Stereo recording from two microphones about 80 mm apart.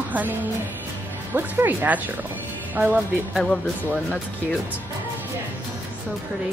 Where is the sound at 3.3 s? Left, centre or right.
Centre.